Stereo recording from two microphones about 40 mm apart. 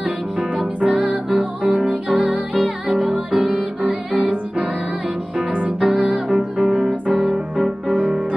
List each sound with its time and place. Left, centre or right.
0.7 s music: right
3.0 s music: centre
3.4 s music: right
5.5 s music: right
6.1 s music: centre
7.9 s music: right